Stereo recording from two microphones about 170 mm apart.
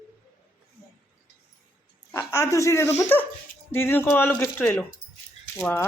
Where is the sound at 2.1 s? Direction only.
15° left (ahead or behind).